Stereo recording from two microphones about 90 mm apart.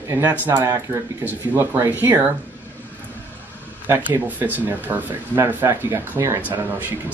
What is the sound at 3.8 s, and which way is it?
Speech, 20° right (ahead or behind).